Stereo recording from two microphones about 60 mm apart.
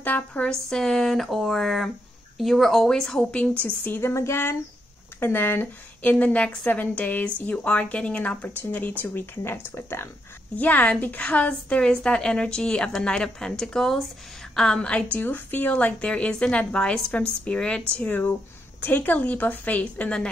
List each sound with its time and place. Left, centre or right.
0.0 s a woman's voice: left
0.5 s speech: centre
3.6 s speech: left
4.1 s speech: left
6.1 s a woman's voice: left
9.0 s speech: left
10.5 s a woman's voice: left
15.1 s a woman's voice: left